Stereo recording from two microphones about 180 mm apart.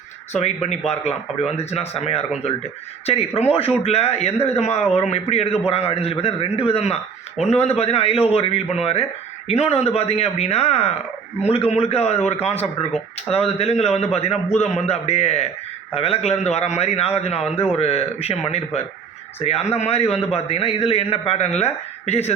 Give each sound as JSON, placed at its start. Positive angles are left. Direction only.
{"t": 0.3, "sound": "a man's voice", "side_deg": 40}